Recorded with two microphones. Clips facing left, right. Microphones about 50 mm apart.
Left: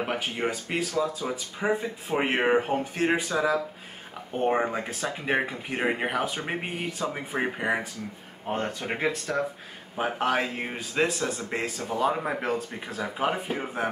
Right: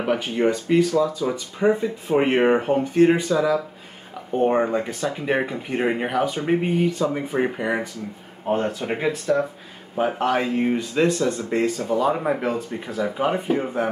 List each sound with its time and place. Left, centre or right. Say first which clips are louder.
0.0 s speech: right 7 dB; centre
0.7 s speech: right 11 dB; centre
1.3 s speech: right 7 dB; centre
8.5 s speech: right 7 dB; centre
12.1 s speech: right 6 dB; centre
12.4 s speech: right 4 dB; centre